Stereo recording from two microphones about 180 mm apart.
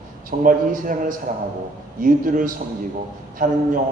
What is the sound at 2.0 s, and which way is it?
Speech, 50° right (ahead or behind).